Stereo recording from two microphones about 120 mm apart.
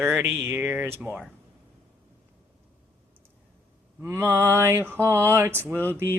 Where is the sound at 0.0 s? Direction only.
20° right (ahead or behind).